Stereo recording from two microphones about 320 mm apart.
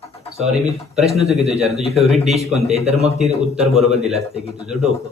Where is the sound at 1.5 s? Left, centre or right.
Centre.